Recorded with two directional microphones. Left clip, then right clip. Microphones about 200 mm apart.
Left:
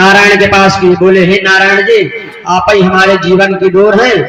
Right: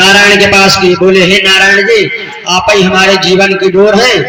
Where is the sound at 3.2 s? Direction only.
55° left (ahead or behind).